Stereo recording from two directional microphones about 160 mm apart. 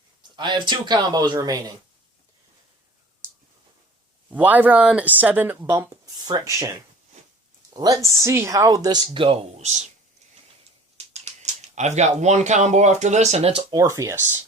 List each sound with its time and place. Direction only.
0.2 s speech: 30° right (ahead or behind)
4.3 s speech: 10° right (ahead or behind); by 9.8 s 45° right (ahead or behind)
10.9 s speech: 40° right (ahead or behind); by 14.3 s 20° right (ahead or behind)